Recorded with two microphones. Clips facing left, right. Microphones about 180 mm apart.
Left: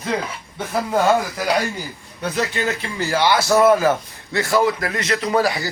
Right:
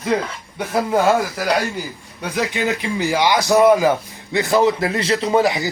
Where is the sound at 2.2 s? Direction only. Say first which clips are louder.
Right 1 dB; 10° right (ahead or behind).